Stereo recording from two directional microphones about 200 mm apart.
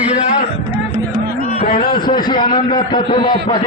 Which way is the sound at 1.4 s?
40° left (ahead or behind).